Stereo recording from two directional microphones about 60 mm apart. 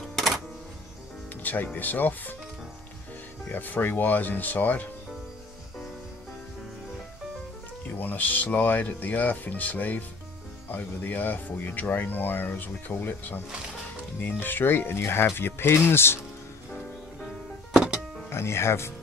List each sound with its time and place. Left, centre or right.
0.0 s music: centre
1.3 s music: left
1.8 s speech: left
3.5 s speech: left
7.8 s speech: left
17.7 s music: centre
18.3 s speech: left